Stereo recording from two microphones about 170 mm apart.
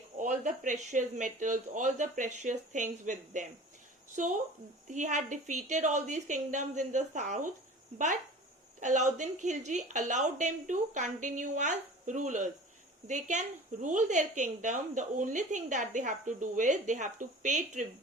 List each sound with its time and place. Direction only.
0.2 s a woman's voice: 50° right (ahead or behind)